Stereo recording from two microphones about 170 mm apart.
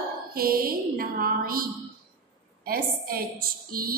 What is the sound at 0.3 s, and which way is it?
A woman's voice, 60° right (ahead or behind).